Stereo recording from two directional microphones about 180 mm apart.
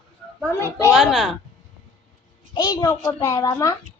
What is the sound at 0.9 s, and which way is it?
Speech, centre (ahead or behind).